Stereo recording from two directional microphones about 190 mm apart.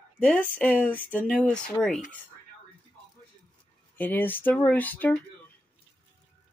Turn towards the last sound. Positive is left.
turn(degrees=10)  # may be behind; listen again after turning